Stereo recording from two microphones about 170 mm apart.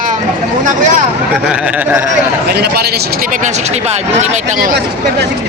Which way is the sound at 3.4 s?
45° right (ahead or behind).